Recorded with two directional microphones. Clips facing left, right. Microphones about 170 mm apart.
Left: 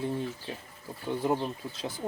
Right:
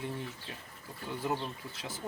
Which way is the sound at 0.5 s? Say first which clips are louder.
Left 6 dB; 25° left (ahead or behind).